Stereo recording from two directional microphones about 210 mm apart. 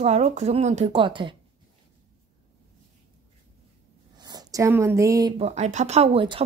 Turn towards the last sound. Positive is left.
turn(degrees=-25)  # may be behind; listen again after turning